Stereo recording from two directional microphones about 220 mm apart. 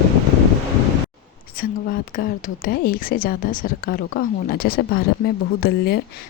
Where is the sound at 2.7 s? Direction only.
40° left (ahead or behind).